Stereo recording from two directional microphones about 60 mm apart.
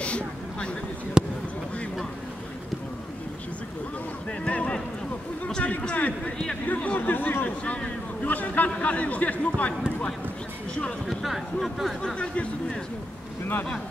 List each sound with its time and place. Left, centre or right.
0.0 s vehicle: centre
1.2 s basketball bounce: centre
4.3 s a sound: centre
11.1 s speech: centre
12.0 s speech: centre